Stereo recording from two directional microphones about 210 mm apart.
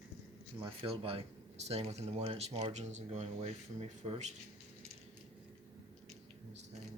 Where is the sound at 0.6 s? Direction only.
25° right (ahead or behind).